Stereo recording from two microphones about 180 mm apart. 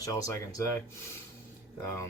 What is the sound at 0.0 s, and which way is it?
Speech, 20° left (ahead or behind).